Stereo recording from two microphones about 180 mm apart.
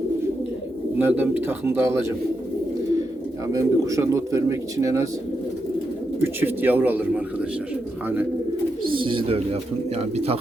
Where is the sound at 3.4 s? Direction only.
15° right (ahead or behind).